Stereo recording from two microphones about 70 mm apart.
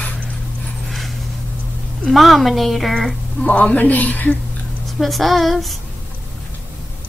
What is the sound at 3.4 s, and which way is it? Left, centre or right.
Speech, left.